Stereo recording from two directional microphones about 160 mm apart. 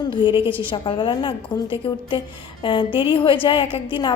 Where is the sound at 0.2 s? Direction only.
30° left (ahead or behind).